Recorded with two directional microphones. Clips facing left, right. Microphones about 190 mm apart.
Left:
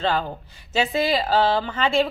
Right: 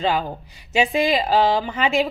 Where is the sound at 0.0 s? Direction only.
10° right (ahead or behind).